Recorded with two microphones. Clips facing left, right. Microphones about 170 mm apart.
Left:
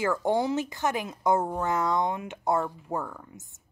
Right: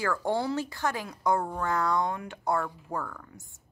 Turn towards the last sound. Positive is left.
turn(degrees=20)  # may be behind; listen again after turning